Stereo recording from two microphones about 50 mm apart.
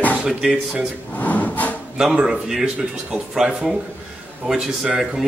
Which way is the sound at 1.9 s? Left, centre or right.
Centre.